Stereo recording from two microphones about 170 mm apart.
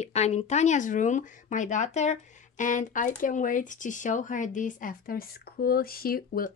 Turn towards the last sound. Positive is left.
turn(degrees=60)  # may be behind; listen again after turning